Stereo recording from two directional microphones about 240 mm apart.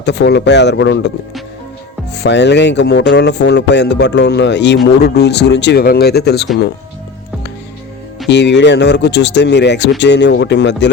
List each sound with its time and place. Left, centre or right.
0.0 s speech: left
2.1 s speech: left
8.3 s speech: left